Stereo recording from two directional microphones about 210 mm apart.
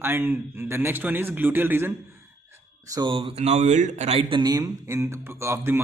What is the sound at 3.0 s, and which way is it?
Speech, 25° right (ahead or behind).